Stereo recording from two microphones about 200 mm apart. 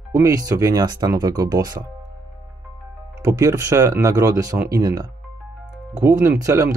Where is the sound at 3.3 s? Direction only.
15° right (ahead or behind).